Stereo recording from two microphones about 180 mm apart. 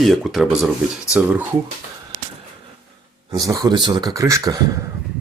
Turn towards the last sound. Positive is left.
turn(degrees=-20)  # may be behind; listen again after turning